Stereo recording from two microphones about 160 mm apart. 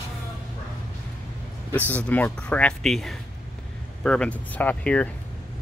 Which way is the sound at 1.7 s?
10° left (ahead or behind).